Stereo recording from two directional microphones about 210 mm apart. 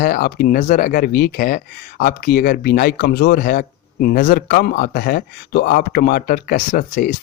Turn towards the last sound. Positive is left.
turn(degrees=40)  # may be behind; listen again after turning